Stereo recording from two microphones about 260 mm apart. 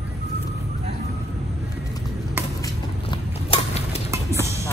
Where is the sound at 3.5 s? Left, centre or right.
Left.